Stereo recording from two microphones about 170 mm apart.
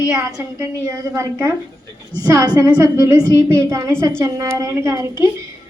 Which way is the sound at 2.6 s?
20° right (ahead or behind).